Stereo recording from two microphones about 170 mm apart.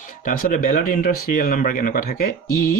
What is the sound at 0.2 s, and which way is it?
Speech, 50° left (ahead or behind).